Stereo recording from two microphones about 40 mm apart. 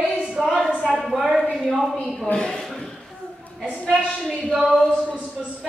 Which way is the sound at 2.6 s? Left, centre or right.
Centre.